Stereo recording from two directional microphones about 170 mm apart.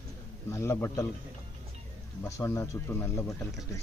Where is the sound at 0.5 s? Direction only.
15° left (ahead or behind).